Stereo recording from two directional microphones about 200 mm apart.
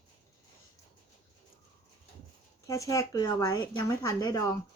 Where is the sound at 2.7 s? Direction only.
15° left (ahead or behind).